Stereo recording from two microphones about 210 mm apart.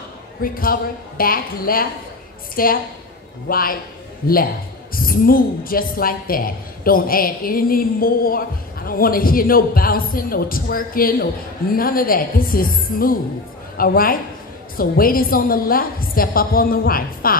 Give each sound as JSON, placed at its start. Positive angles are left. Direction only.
{"t": 0.4, "sound": "a woman's voice", "side_deg": 45}
{"t": 4.9, "sound": "a woman's voice", "side_deg": 45}